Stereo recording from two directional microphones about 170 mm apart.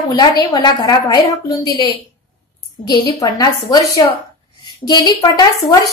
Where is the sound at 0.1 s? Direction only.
25° left (ahead or behind).